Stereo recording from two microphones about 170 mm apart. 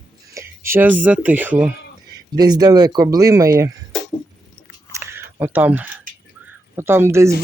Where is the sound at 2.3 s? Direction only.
25° right (ahead or behind).